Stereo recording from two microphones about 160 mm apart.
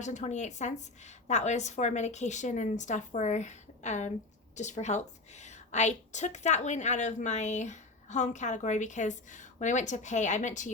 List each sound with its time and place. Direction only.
0.0 s a woman's voice: 50° left (ahead or behind)